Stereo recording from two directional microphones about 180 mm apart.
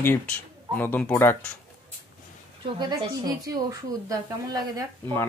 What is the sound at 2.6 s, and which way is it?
A woman's voice, 25° right (ahead or behind).